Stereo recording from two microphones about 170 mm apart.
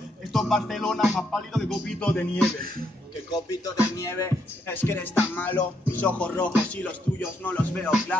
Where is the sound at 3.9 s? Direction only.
15° left (ahead or behind).